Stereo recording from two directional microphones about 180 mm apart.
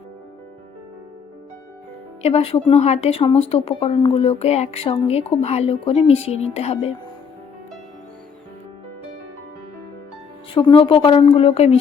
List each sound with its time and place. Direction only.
2.2 s speech: 35° left (ahead or behind)
10.5 s speech: 30° left (ahead or behind)